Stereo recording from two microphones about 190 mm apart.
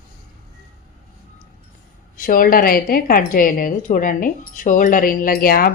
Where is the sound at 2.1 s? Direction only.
50° left (ahead or behind).